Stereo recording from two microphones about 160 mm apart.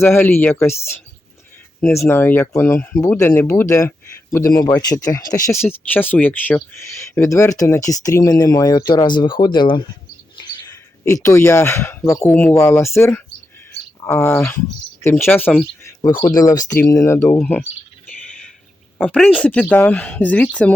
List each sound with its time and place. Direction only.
0.0 s speech: 15° left (ahead or behind)
18.9 s speech: 10° left (ahead or behind)